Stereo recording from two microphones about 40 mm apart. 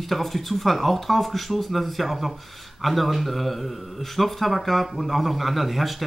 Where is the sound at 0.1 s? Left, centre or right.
Centre.